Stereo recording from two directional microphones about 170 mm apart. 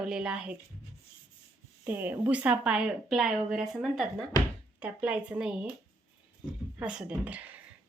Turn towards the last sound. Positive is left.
turn(degrees=-5)  # may be behind; listen again after turning